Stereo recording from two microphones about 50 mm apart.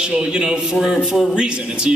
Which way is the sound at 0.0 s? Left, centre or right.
Centre.